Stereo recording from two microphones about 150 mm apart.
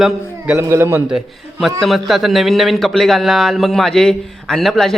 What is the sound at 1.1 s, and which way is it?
A man's voice, centre (ahead or behind).